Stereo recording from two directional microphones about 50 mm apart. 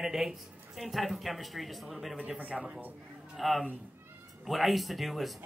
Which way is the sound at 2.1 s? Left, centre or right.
Right.